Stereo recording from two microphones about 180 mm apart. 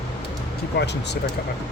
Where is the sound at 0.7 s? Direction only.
70° left (ahead or behind).